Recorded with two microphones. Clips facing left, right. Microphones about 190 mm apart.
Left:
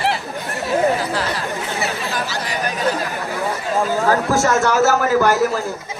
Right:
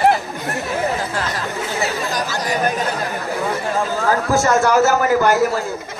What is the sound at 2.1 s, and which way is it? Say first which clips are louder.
Chatter: right 3 dB; 45° right (ahead or behind).